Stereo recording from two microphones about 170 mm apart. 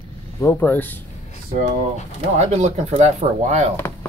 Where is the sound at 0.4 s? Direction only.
10° left (ahead or behind).